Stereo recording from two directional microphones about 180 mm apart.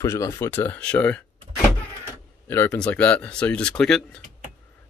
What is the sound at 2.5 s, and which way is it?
Speech, 10° left (ahead or behind).